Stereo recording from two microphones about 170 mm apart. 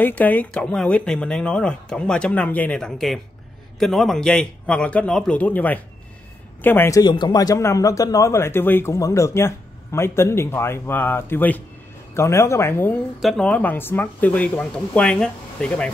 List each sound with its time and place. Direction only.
0.0 s a man's voice: 10° left (ahead or behind)
13.2 s speech: 5° left (ahead or behind)